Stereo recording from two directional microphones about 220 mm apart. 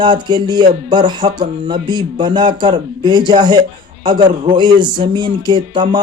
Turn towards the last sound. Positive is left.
turn(degrees=-20)  # may be behind; listen again after turning